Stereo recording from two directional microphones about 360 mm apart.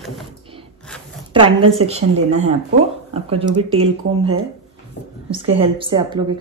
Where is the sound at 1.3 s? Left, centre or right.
Centre.